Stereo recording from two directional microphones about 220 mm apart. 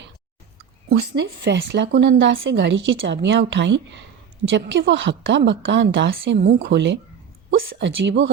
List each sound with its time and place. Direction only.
0.6 s a woman's voice: 45° right (ahead or behind)